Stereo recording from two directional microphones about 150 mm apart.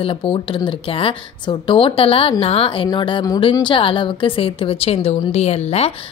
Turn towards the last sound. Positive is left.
turn(degrees=45)  # may be behind; listen again after turning